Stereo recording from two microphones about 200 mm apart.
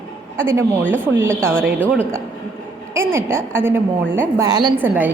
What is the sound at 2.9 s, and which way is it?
A woman's voice, 10° right (ahead or behind).